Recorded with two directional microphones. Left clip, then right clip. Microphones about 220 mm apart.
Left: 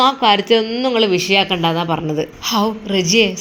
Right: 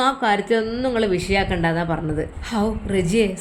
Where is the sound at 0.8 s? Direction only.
5° left (ahead or behind).